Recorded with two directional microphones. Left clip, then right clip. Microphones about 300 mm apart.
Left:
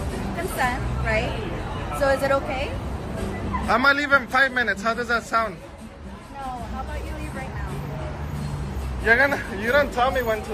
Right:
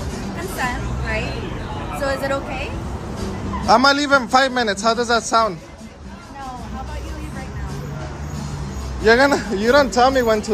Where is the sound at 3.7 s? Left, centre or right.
Centre.